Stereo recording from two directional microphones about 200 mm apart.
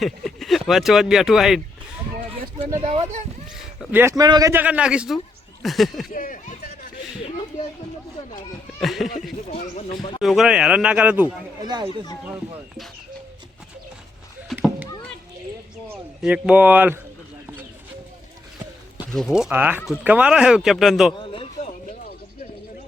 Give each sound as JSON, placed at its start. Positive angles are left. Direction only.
{"t": 0.0, "sound": "speech", "side_deg": 0}
{"t": 2.7, "sound": "speech", "side_deg": -35}
{"t": 3.8, "sound": "speech", "side_deg": -5}
{"t": 6.1, "sound": "a sound", "side_deg": 45}
{"t": 8.8, "sound": "a sound", "side_deg": 0}
{"t": 9.5, "sound": "speech", "side_deg": 30}
{"t": 10.2, "sound": "speech", "side_deg": 0}
{"t": 11.6, "sound": "speech", "side_deg": -20}
{"t": 12.3, "sound": "speech", "side_deg": 0}
{"t": 14.5, "sound": "a sound", "side_deg": -5}
{"t": 15.9, "sound": "speech", "side_deg": -5}
{"t": 19.1, "sound": "speech", "side_deg": 0}
{"t": 21.2, "sound": "a sound", "side_deg": 30}